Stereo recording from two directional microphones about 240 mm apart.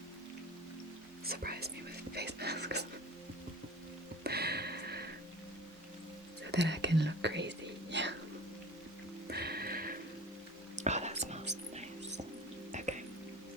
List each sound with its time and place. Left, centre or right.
1.2 s whispering: right
2.1 s speech: right
4.2 s music: right
6.5 s whispering: right
9.2 s music: right
10.8 s whispering: right
11.7 s music: right